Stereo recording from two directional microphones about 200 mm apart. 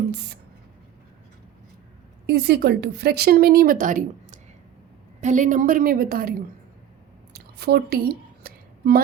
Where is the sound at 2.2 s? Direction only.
55° right (ahead or behind).